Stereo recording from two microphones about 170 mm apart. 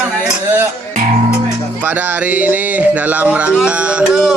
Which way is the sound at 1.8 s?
10° right (ahead or behind).